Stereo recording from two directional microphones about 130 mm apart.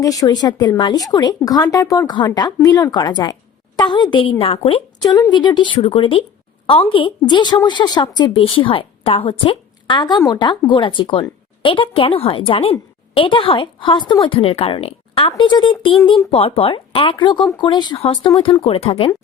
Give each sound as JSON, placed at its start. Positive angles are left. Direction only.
{"t": 0.0, "sound": "a woman's voice", "side_deg": 25}
{"t": 5.0, "sound": "a woman's voice", "side_deg": 30}
{"t": 15.3, "sound": "a woman's voice", "side_deg": 35}